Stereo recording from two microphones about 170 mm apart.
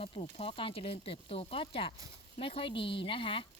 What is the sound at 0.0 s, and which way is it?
Speech, 35° left (ahead or behind).